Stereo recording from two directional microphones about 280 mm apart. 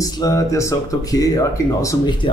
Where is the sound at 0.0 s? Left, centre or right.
Centre.